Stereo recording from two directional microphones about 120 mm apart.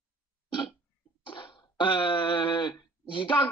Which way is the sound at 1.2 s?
45° left (ahead or behind).